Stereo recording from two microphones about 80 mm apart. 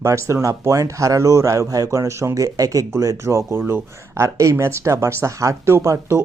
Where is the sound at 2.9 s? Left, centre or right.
Right.